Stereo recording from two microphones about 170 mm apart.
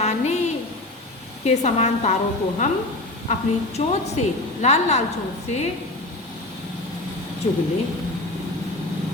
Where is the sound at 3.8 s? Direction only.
40° left (ahead or behind).